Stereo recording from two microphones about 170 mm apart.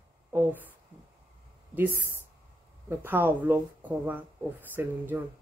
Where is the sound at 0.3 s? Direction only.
10° right (ahead or behind).